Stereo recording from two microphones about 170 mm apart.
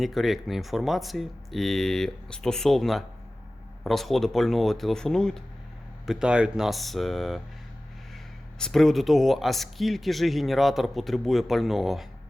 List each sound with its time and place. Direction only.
0.0 s speech: centre (ahead or behind)
8.5 s speech: 5° left (ahead or behind)